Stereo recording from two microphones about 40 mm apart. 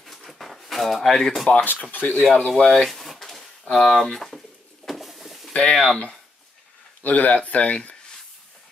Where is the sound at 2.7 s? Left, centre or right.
Centre.